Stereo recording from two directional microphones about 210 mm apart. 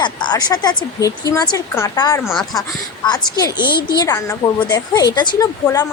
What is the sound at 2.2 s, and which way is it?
Speech, centre (ahead or behind).